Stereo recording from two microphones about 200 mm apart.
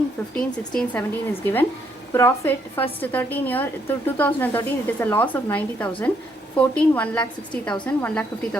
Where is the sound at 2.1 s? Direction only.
10° left (ahead or behind).